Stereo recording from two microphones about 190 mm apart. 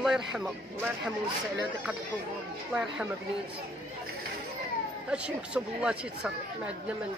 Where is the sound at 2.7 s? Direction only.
5° right (ahead or behind).